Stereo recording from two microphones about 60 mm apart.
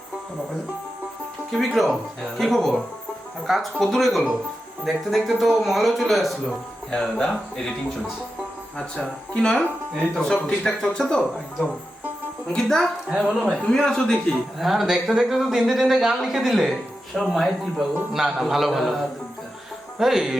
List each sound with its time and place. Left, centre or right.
1.5 s speech: centre
12.5 s speech: centre
13.1 s speech: centre
13.6 s speech: centre
14.6 s speech: centre